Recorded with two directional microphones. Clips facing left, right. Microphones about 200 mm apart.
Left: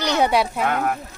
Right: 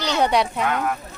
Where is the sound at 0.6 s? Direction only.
45° left (ahead or behind).